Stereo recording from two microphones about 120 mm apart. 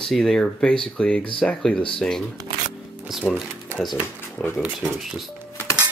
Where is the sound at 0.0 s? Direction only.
5° left (ahead or behind).